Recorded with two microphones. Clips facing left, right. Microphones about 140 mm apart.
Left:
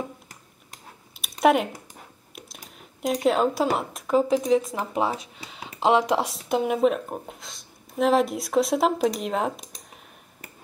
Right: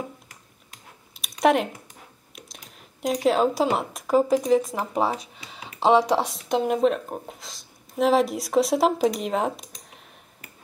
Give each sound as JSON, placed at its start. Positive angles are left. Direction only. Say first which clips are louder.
{"t": 1.4, "sound": "speech", "louder": "even", "side_deg": 0}